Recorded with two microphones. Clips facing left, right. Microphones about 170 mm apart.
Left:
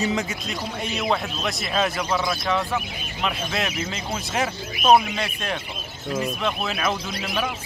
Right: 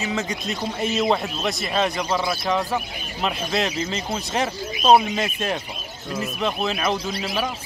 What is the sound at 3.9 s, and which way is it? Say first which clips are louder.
Speech: even; 5° left (ahead or behind).